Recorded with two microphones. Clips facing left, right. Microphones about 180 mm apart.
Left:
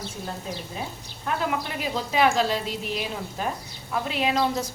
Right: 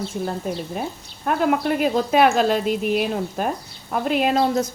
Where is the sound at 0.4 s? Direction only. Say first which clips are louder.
Right 7 dB; 55° right (ahead or behind).